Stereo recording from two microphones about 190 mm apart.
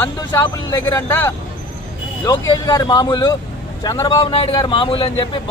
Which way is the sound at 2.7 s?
20° left (ahead or behind).